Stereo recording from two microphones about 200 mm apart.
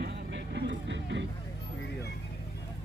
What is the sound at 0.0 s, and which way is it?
Vehicle, 60° right (ahead or behind).